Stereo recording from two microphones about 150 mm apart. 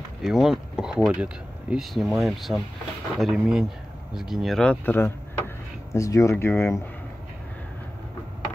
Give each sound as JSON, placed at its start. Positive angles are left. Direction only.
{"t": 0.2, "sound": "speech", "side_deg": -5}